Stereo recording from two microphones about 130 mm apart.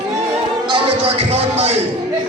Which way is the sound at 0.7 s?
45° right (ahead or behind).